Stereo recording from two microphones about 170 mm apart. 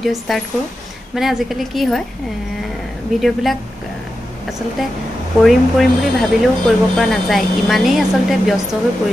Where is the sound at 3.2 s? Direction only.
Centre (ahead or behind).